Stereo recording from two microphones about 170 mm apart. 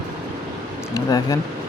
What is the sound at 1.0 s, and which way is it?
Speech, 20° left (ahead or behind).